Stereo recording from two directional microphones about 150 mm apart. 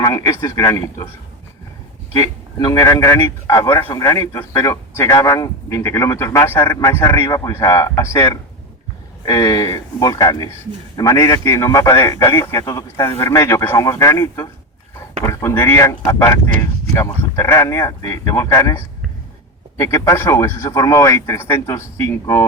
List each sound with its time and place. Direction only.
0.0 s a man's voice: 20° left (ahead or behind)
2.1 s a man's voice: 25° left (ahead or behind)